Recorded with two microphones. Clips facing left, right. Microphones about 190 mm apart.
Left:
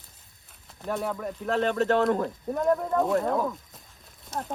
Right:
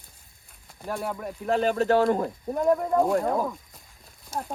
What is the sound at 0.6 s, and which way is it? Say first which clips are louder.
Speech: left 1 dB; 5° right (ahead or behind).